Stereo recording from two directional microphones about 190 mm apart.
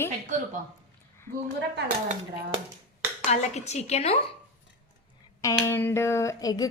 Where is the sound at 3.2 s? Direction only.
35° left (ahead or behind).